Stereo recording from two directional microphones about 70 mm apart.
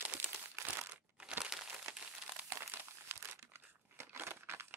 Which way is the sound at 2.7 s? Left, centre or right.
Right.